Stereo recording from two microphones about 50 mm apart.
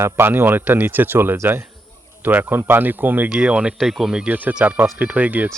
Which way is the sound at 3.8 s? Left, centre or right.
Centre.